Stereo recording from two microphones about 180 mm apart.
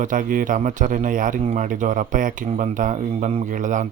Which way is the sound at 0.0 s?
50° right (ahead or behind).